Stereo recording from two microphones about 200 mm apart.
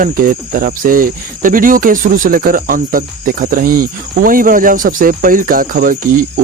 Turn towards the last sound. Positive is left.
turn(degrees=-45)  # may be behind; listen again after turning